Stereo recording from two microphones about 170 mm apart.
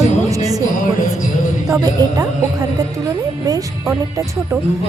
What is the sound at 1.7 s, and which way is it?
Speech, 20° right (ahead or behind).